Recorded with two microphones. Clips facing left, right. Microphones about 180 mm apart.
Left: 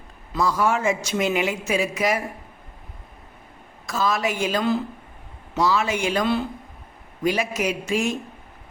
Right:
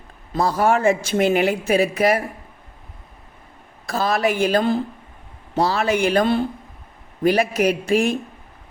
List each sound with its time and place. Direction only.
0.3 s a man's voice: 60° right (ahead or behind)
3.8 s a man's voice: 60° right (ahead or behind)